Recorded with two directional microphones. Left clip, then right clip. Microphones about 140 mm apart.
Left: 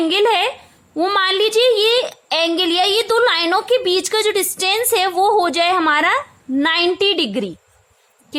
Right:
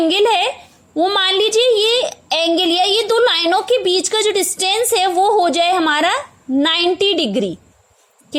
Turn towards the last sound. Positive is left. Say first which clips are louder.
# right 2 dB
turn(degrees=-5)  # may be behind; listen again after turning